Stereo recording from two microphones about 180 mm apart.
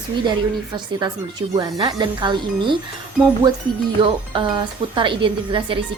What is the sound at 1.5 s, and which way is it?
Speech, 20° right (ahead or behind).